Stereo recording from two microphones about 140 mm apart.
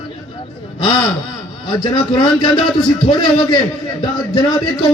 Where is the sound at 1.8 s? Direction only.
35° left (ahead or behind).